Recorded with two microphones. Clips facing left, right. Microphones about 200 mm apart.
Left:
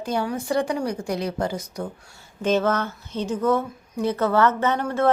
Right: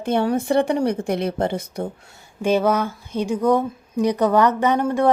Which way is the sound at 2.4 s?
10° right (ahead or behind).